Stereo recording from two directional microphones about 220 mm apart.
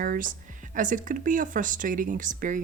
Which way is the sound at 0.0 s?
40° right (ahead or behind).